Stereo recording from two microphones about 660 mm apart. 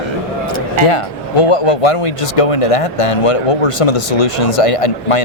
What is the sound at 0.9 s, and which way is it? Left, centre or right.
Speech, left.